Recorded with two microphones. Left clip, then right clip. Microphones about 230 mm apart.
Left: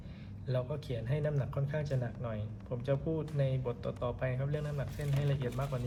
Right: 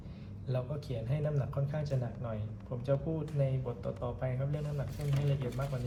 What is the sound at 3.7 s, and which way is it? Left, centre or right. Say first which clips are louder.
A man's voice: left 2 dB; left.